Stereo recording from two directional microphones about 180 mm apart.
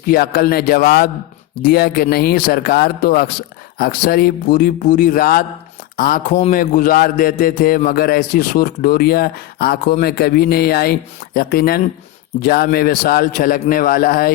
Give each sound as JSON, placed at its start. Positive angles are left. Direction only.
{"t": 0.0, "sound": "a man's voice", "side_deg": 55}